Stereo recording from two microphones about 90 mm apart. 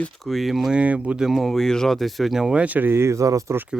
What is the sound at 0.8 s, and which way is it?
Speech, 15° right (ahead or behind).